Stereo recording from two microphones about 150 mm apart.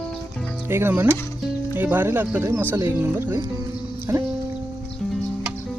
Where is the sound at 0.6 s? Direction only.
15° right (ahead or behind).